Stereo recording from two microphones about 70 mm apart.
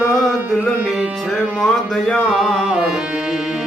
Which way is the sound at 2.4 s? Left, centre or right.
Centre.